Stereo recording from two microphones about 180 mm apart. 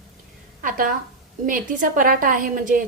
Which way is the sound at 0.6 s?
50° right (ahead or behind).